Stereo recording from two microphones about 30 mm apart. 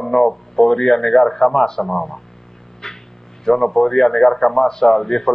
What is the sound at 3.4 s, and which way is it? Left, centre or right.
A man's voice, centre.